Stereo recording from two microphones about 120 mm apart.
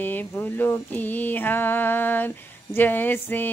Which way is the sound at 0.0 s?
15° left (ahead or behind).